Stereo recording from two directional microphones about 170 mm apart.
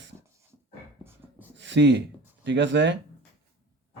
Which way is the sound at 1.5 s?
90° right.